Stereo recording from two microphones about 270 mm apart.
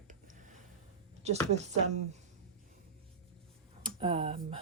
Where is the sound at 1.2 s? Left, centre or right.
Right.